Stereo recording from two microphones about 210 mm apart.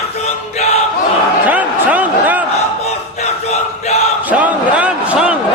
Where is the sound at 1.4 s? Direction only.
5° right (ahead or behind).